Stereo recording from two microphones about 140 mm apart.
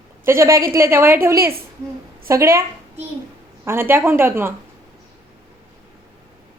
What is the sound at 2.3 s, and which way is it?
Speech, 20° right (ahead or behind).